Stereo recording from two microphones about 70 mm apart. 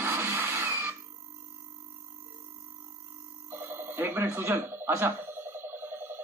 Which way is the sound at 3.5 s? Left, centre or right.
Right.